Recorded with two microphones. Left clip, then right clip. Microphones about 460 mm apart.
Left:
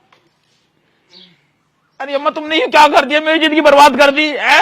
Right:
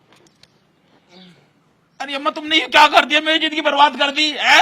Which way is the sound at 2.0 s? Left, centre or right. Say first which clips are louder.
Left 5 dB; left.